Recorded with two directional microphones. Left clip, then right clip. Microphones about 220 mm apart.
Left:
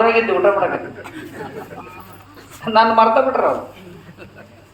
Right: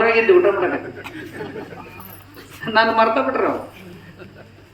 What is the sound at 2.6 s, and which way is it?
Speech, 15° left (ahead or behind).